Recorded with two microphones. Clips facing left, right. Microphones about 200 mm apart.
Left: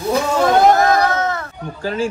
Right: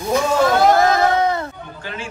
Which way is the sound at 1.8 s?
35° left (ahead or behind).